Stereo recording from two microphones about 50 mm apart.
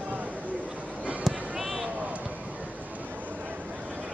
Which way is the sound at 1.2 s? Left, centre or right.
Centre.